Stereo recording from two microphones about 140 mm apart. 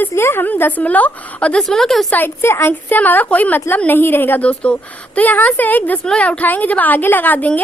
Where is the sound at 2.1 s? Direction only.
15° left (ahead or behind).